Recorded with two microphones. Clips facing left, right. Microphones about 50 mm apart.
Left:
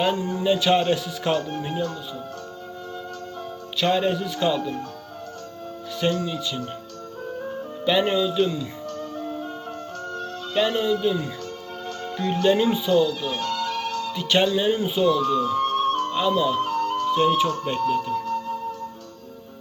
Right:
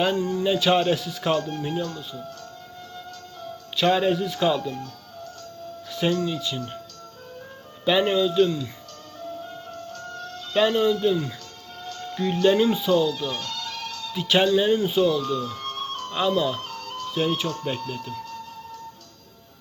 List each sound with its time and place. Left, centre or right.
0.4 s speech: centre
1.4 s speech: centre
3.8 s speech: centre
5.9 s speech: centre
7.9 s speech: centre
9.1 s music: left
10.7 s speech: centre
13.4 s music: left
14.1 s speech: centre
15.2 s music: left
16.3 s speech: centre
16.6 s music: left
17.1 s speech: centre
18.1 s music: left